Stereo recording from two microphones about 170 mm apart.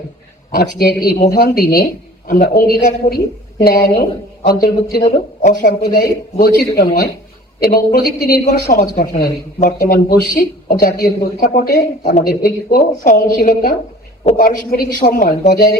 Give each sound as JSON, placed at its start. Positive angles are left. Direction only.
{"t": 0.5, "sound": "a woman's voice", "side_deg": 55}